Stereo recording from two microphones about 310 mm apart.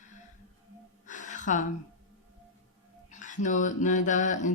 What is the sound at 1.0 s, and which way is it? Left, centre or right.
Gasp, left.